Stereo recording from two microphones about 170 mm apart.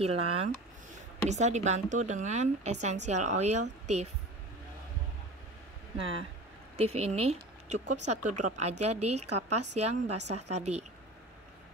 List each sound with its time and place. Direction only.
0.0 s a woman's voice: 35° right (ahead or behind)
5.9 s a woman's voice: 35° right (ahead or behind)